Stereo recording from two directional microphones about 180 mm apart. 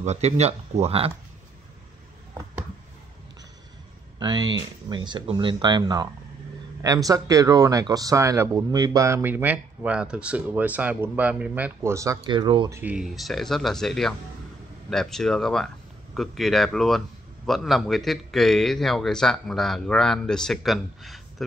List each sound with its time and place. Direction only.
0.0 s speech: 40° right (ahead or behind)
4.2 s speech: 25° right (ahead or behind)
12.7 s a man's voice: 5° right (ahead or behind)